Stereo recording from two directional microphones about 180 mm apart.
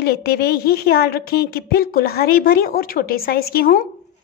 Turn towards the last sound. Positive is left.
turn(degrees=55)  # may be behind; listen again after turning